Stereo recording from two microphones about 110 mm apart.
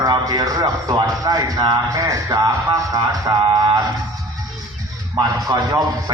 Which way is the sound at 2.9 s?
45° right (ahead or behind).